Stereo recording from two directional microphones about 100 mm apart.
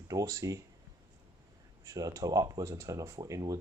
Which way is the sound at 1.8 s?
35° right (ahead or behind).